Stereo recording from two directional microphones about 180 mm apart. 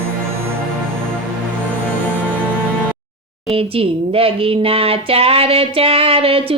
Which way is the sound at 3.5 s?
30° right (ahead or behind).